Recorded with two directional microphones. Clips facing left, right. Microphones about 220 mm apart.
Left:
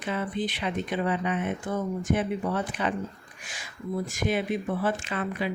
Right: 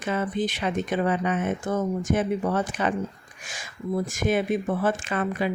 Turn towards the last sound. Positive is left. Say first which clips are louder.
# right 4 dB
turn(degrees=-50)  # may be behind; listen again after turning